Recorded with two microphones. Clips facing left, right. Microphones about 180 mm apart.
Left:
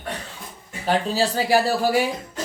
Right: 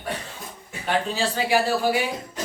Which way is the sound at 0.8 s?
40° left (ahead or behind).